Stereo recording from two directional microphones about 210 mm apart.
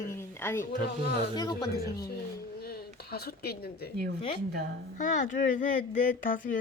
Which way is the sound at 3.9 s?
50° right (ahead or behind).